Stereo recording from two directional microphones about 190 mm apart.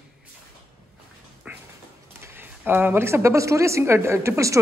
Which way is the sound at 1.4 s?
5° right (ahead or behind).